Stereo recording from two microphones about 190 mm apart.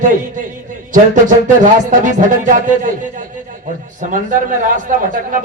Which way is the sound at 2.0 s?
40° right (ahead or behind).